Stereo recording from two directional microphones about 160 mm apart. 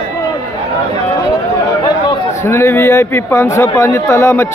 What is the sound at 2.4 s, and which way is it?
Speech, 15° left (ahead or behind).